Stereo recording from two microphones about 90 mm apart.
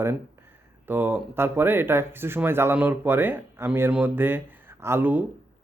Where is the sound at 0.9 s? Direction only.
20° right (ahead or behind).